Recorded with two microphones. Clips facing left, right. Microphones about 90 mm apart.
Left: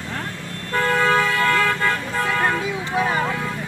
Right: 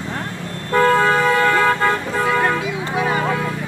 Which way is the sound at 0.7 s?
25° right (ahead or behind).